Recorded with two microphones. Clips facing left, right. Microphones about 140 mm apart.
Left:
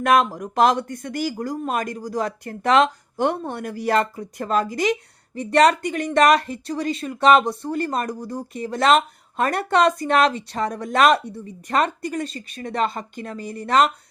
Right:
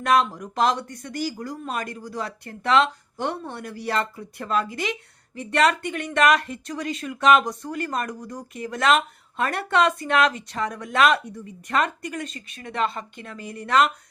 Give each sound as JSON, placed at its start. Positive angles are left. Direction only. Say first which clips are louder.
{"t": 0.0, "sound": "speech", "louder": "left 3 dB", "side_deg": 50}